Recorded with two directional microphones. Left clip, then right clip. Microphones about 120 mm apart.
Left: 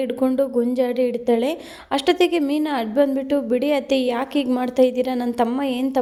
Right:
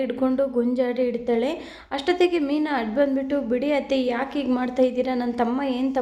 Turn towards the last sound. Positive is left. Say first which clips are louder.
# left 3 dB
turn(degrees=45)  # may be behind; listen again after turning